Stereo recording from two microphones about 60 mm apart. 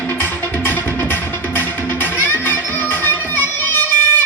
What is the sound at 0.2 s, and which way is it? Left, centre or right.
Music, left.